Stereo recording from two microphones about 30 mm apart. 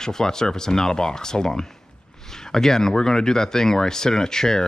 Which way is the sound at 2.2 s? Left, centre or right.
Centre.